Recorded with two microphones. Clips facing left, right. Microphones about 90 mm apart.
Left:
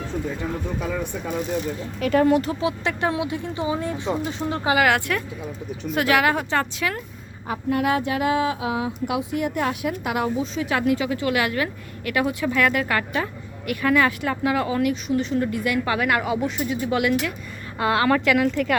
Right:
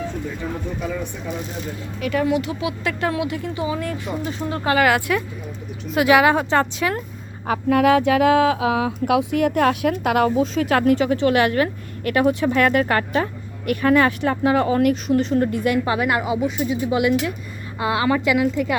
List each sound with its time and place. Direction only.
2.0 s speech: 40° left (ahead or behind)
3.0 s speech: 20° left (ahead or behind)
4.8 s speech: 5° right (ahead or behind)
6.1 s a woman's voice: 20° right (ahead or behind)
7.4 s speech: 90° right; by 14.8 s 35° right (ahead or behind)
14.8 s a woman's voice: 50° right (ahead or behind); by 18.8 s 10° right (ahead or behind)